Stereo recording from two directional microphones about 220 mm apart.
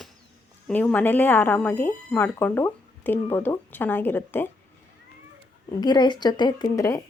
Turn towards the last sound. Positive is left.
turn(degrees=15)  # may be behind; listen again after turning